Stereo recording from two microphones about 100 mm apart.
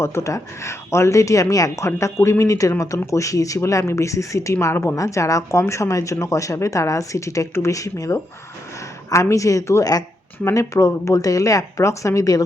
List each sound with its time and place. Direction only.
0.0 s speech: 25° left (ahead or behind)